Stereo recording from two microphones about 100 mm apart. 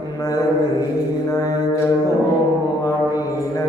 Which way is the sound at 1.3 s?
30° left (ahead or behind).